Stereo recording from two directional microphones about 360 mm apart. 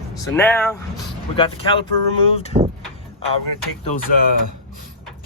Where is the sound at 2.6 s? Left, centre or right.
Centre.